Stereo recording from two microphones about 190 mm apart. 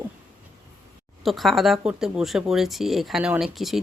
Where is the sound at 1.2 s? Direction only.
Centre (ahead or behind).